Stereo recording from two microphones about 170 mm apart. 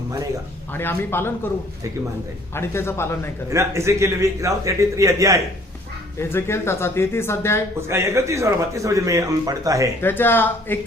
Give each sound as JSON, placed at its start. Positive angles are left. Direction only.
{"t": 0.7, "sound": "speech", "side_deg": 10}
{"t": 2.6, "sound": "speech", "side_deg": 15}
{"t": 3.5, "sound": "a man's voice", "side_deg": -15}
{"t": 6.1, "sound": "speech", "side_deg": 15}
{"t": 7.8, "sound": "a man's voice", "side_deg": -15}
{"t": 10.0, "sound": "speech", "side_deg": 10}